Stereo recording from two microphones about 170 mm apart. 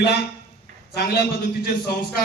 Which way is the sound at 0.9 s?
70° left (ahead or behind).